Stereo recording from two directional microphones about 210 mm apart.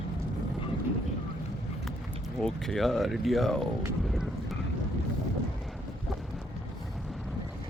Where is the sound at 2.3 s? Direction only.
Centre (ahead or behind).